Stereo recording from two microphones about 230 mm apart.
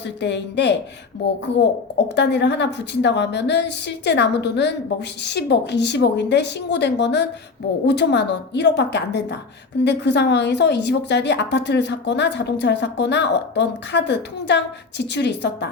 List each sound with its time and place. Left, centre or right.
0.2 s a woman's voice: left
2.0 s a woman's voice: left